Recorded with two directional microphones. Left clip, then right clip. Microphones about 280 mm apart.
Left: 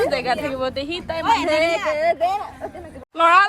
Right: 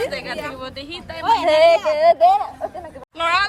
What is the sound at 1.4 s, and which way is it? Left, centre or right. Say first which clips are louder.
Speech: right 6 dB; centre.